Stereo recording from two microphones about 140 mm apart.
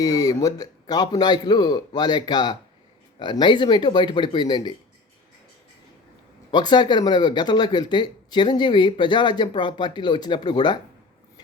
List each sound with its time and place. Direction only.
0.0 s speech: 25° left (ahead or behind)
6.5 s speech: 30° left (ahead or behind)